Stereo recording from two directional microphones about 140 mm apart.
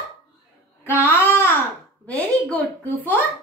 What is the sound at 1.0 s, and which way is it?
Babbling, 15° left (ahead or behind).